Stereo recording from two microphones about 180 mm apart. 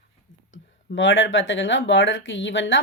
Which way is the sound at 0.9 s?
90° left.